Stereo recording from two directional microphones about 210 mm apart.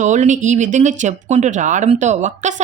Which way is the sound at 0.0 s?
35° right (ahead or behind).